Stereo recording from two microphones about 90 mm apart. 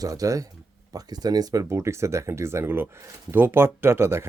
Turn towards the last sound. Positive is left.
turn(degrees=-30)  # may be behind; listen again after turning